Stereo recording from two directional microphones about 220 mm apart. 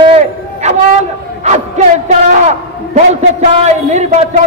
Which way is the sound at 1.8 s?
30° right (ahead or behind).